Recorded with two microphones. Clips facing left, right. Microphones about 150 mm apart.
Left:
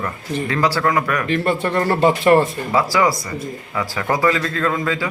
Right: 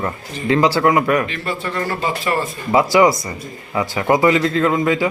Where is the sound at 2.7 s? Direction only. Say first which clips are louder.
Right 9 dB; 20° right (ahead or behind).